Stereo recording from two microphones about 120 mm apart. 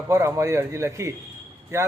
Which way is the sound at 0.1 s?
25° right (ahead or behind).